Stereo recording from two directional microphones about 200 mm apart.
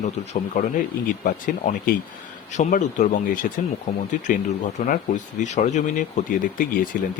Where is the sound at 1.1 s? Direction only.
40° left (ahead or behind).